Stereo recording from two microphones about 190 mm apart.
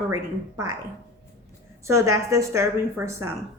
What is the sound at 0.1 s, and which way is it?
Speech, 15° right (ahead or behind).